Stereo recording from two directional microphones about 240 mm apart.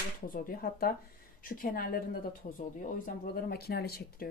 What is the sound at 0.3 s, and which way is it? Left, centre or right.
A woman's voice, left.